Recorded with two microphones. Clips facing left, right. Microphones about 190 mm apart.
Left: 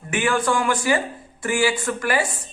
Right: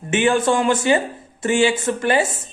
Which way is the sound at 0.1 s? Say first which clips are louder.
Right 4 dB; 25° right (ahead or behind).